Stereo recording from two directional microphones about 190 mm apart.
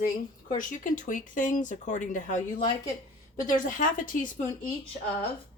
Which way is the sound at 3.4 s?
45° left (ahead or behind).